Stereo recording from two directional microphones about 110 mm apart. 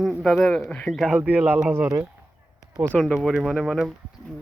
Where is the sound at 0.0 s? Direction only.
Centre (ahead or behind).